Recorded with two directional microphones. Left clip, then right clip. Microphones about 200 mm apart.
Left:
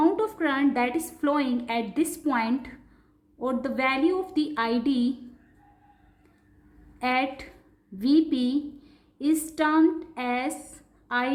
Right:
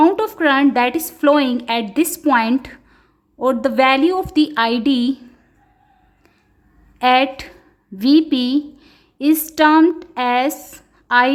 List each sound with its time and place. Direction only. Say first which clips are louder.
0.0 s a woman's voice: right 9 dB; 40° right (ahead or behind)
7.0 s a woman's voice: right 12 dB; 40° right (ahead or behind)